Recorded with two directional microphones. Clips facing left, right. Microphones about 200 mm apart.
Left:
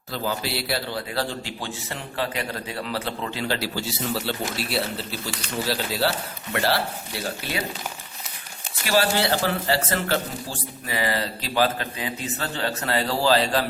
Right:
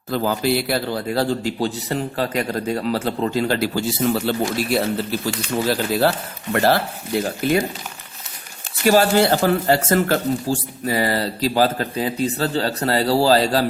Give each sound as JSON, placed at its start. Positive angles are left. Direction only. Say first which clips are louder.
{"t": 0.1, "sound": "a man's voice", "louder": "right 8 dB", "side_deg": -50}
{"t": 8.8, "sound": "speech", "louder": "right 7 dB", "side_deg": -45}